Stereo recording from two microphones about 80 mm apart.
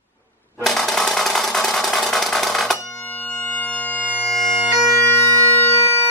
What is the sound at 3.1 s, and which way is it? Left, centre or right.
Bagpipes, centre.